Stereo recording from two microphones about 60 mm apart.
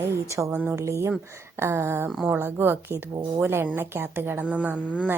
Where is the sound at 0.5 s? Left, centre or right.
Right.